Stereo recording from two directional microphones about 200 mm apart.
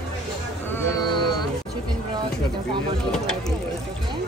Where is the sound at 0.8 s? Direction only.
20° left (ahead or behind).